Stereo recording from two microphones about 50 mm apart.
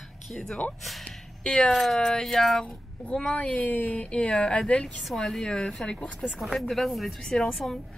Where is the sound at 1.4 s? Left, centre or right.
Centre.